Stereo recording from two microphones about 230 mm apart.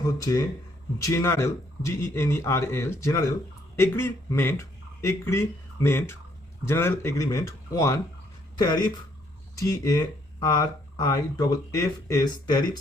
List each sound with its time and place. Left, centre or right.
0.0 s speech: centre